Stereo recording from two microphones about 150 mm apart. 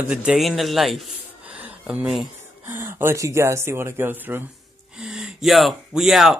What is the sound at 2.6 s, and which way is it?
Speech, 15° right (ahead or behind).